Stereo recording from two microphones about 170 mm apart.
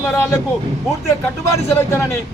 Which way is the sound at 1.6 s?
15° left (ahead or behind).